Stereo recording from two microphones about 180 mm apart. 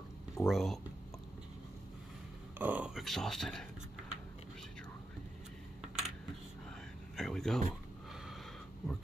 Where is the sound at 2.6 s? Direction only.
10° right (ahead or behind).